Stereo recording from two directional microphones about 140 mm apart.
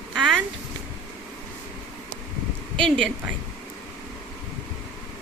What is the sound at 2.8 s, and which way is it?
Speech, 5° left (ahead or behind).